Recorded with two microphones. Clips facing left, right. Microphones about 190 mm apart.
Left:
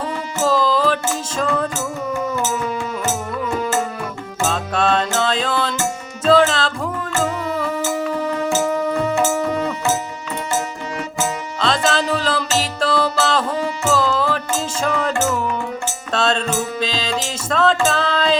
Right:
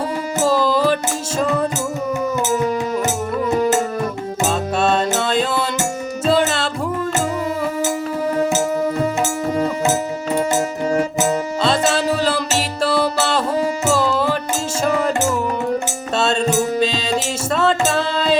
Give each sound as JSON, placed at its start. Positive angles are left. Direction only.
{"t": 0.3, "sound": "music", "side_deg": -10}
{"t": 4.4, "sound": "music", "side_deg": -5}
{"t": 8.4, "sound": "music", "side_deg": -20}
{"t": 11.6, "sound": "music", "side_deg": -5}